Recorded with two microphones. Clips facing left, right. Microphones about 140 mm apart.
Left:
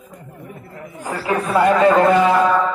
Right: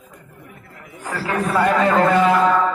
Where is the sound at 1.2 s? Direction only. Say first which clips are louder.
Left 3 dB; 15° left (ahead or behind).